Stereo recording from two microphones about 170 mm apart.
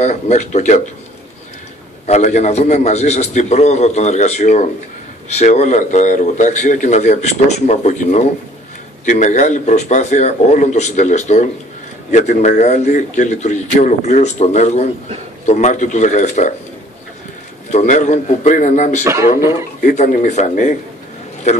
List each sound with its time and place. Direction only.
0.0 s a man's voice: 45° left (ahead or behind)
2.0 s a man's voice: 40° left (ahead or behind)
17.6 s a man's voice: 45° left (ahead or behind)
19.0 s speech: 15° right (ahead or behind)
19.8 s a man's voice: 50° left (ahead or behind)